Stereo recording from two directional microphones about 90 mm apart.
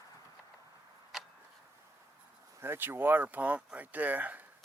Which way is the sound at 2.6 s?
25° right (ahead or behind).